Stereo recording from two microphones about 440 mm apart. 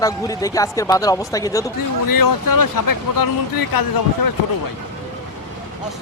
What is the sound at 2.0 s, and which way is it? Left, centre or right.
Speech, left.